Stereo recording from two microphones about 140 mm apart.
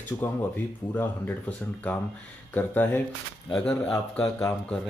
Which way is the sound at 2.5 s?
15° left (ahead or behind).